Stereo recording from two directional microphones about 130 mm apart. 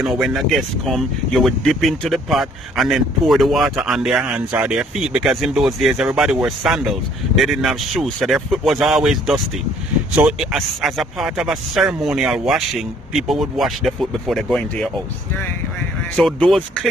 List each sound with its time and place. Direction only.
0.0 s speech: centre (ahead or behind)
16.1 s speech: 5° left (ahead or behind)